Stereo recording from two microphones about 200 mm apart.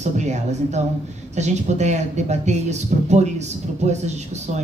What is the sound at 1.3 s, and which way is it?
Speech, 35° right (ahead or behind).